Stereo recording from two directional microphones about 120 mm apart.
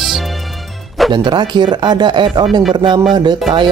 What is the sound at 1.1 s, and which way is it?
Speech, 40° right (ahead or behind).